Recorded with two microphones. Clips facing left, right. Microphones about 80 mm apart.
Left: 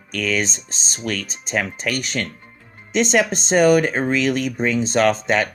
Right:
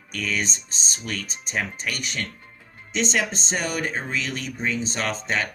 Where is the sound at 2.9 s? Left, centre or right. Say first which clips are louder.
Left 7 dB; left.